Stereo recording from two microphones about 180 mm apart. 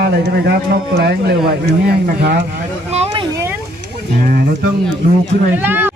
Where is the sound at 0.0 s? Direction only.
65° right (ahead or behind).